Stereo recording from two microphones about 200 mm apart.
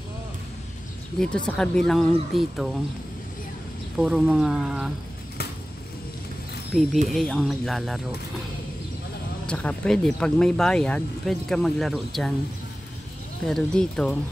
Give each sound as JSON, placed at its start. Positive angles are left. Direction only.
{"t": 1.2, "sound": "speech", "side_deg": 5}
{"t": 4.0, "sound": "speech", "side_deg": -5}
{"t": 6.7, "sound": "speech", "side_deg": 0}
{"t": 9.5, "sound": "speech", "side_deg": 5}
{"t": 13.5, "sound": "speech", "side_deg": 5}